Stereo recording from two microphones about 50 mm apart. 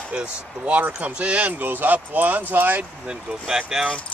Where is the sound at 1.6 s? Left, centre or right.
Right.